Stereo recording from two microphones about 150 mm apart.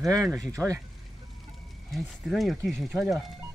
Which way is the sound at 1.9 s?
Centre (ahead or behind).